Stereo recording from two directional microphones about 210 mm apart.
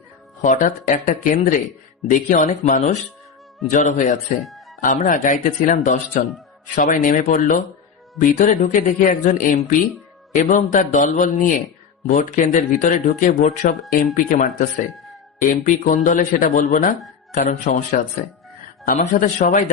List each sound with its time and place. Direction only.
0.4 s speech: 35° left (ahead or behind)